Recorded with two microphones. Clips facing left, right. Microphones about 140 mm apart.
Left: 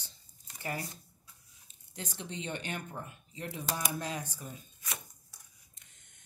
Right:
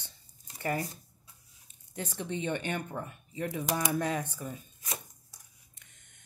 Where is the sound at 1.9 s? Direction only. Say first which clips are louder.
Right 6 dB; 55° right (ahead or behind).